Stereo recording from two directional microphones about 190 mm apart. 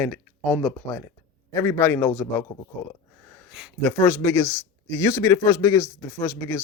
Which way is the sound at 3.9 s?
10° left (ahead or behind).